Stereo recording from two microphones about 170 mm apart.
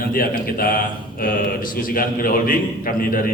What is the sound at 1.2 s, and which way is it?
A man's voice, 60° left (ahead or behind).